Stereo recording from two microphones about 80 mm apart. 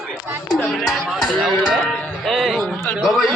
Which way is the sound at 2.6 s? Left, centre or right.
Centre.